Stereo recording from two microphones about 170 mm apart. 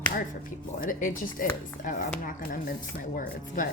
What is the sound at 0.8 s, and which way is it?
Speech, 55° left (ahead or behind).